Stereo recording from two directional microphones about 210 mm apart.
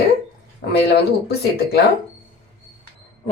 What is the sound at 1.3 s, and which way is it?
Speech, 50° left (ahead or behind).